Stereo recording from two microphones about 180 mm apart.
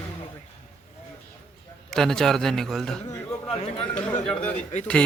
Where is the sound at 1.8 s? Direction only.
5° left (ahead or behind).